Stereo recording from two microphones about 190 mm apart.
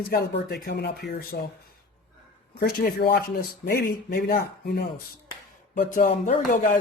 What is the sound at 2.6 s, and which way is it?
Speech, 50° left (ahead or behind).